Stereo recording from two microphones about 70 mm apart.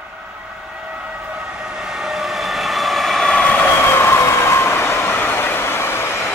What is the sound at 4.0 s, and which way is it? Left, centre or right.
Vehicle, left.